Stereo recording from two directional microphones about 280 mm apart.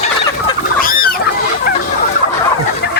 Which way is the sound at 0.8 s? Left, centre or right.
Left.